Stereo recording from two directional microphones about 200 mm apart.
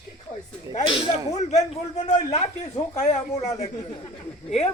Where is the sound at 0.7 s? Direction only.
25° left (ahead or behind).